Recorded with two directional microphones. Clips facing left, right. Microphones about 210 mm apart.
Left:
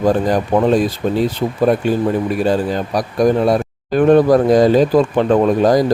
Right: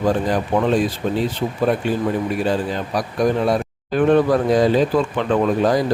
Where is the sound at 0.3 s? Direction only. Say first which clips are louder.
Left 4 dB; 40° left (ahead or behind).